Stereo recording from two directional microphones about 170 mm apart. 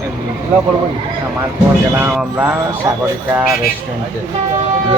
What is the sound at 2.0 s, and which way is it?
Speech, 10° right (ahead or behind).